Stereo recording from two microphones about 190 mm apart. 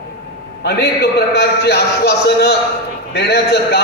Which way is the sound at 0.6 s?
55° left (ahead or behind).